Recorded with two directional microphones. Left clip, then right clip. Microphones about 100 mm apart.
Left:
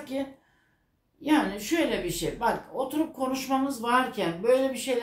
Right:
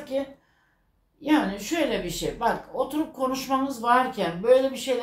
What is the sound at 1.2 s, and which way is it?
A woman's voice, 15° right (ahead or behind).